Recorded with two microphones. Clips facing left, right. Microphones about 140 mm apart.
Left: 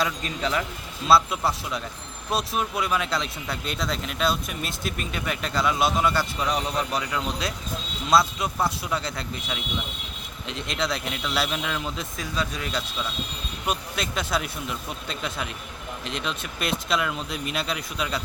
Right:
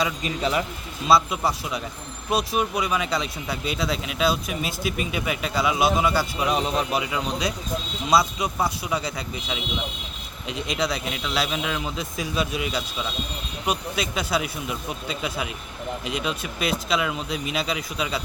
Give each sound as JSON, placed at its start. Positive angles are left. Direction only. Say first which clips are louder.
{"t": 0.0, "sound": "speech", "louder": "right 2 dB", "side_deg": -10}
{"t": 1.0, "sound": "speech", "louder": "even", "side_deg": 0}
{"t": 6.5, "sound": "speech", "louder": "right 4 dB", "side_deg": -20}
{"t": 8.0, "sound": "speech", "louder": "even", "side_deg": 0}